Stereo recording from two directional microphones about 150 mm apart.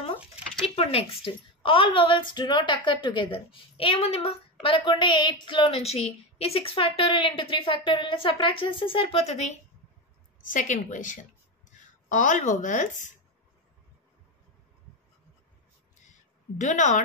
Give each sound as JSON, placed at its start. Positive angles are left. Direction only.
{"t": 0.7, "sound": "a woman's voice", "side_deg": 40}
{"t": 10.5, "sound": "a woman's voice", "side_deg": 60}
{"t": 16.1, "sound": "a sound", "side_deg": 55}